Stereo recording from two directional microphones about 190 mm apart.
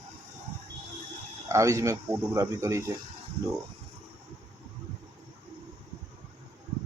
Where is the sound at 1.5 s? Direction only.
15° right (ahead or behind).